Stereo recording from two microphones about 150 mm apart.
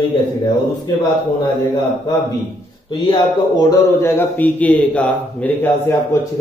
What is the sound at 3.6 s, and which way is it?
A man's voice, 15° left (ahead or behind).